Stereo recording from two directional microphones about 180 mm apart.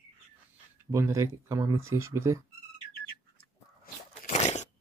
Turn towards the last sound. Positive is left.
turn(degrees=40)  # may be behind; listen again after turning